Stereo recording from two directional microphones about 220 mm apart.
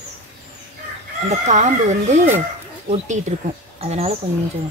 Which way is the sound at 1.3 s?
35° right (ahead or behind).